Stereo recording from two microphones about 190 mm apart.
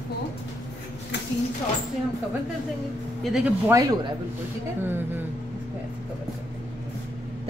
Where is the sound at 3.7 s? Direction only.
15° right (ahead or behind).